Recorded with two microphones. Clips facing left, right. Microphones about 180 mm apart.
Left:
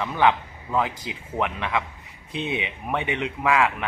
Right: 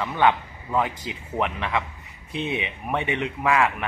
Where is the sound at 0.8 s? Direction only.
15° left (ahead or behind).